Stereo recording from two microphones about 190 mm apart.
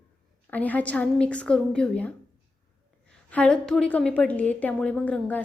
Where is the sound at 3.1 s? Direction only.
5° left (ahead or behind).